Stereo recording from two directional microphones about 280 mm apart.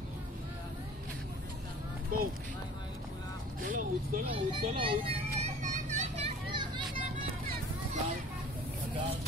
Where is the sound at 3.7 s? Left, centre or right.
Right.